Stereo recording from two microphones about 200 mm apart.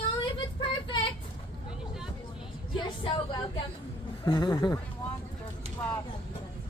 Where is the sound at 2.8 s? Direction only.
20° left (ahead or behind).